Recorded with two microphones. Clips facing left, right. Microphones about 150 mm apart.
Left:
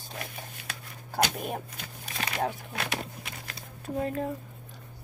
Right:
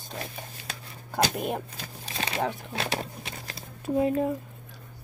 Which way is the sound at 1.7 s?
30° right (ahead or behind).